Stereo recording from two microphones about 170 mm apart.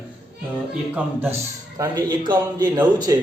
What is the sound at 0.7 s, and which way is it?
Speech, 5° right (ahead or behind).